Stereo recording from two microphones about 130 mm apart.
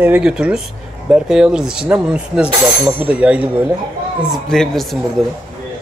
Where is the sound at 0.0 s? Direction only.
10° right (ahead or behind).